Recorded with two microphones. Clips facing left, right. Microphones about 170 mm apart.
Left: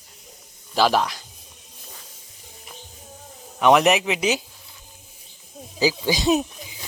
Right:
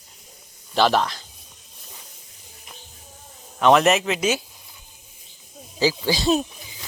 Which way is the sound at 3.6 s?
15° left (ahead or behind).